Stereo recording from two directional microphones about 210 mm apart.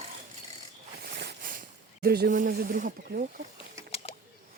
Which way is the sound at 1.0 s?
50° right (ahead or behind).